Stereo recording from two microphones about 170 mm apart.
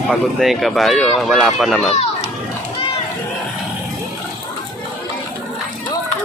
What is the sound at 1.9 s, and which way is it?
Children playing, 40° left (ahead or behind).